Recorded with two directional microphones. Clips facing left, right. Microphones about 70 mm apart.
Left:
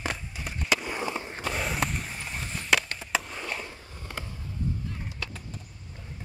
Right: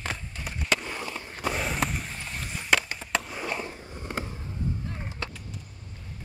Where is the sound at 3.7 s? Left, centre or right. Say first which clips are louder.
Right 5 dB; right.